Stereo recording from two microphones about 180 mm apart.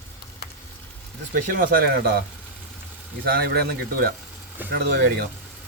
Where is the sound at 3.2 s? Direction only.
60° right (ahead or behind).